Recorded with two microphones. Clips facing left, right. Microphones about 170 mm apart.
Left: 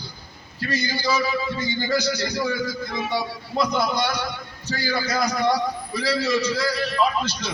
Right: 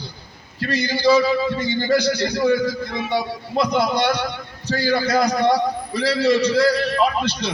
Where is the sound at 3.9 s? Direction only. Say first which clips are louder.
Right 5 dB; 60° right (ahead or behind).